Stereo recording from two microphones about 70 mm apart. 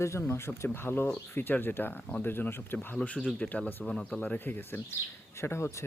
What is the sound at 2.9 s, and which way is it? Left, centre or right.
Speech, centre.